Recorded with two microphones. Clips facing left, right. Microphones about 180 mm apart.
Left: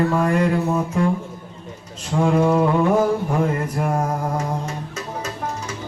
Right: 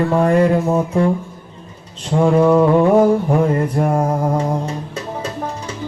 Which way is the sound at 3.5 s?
30° right (ahead or behind).